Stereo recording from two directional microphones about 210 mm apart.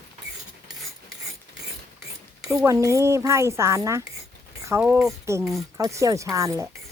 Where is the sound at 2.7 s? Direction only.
15° right (ahead or behind).